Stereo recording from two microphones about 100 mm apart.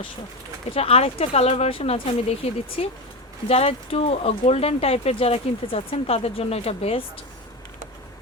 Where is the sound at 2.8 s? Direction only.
90° left.